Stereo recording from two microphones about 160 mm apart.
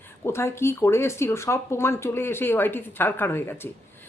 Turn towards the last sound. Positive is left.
turn(degrees=15)  # may be behind; listen again after turning